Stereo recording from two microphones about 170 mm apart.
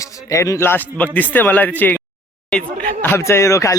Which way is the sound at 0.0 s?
20° left (ahead or behind).